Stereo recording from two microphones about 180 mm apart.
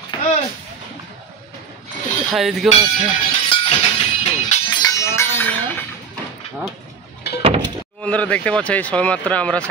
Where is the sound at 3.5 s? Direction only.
30° left (ahead or behind).